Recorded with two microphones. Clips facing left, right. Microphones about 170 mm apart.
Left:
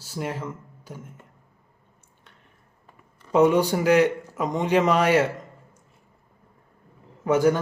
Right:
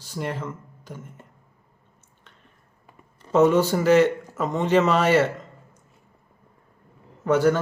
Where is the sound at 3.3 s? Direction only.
15° left (ahead or behind).